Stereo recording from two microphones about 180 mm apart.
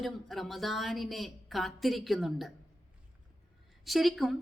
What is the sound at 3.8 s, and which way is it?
Speech, centre (ahead or behind).